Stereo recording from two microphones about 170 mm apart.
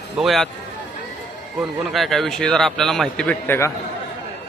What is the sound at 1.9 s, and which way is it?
Speech, centre (ahead or behind).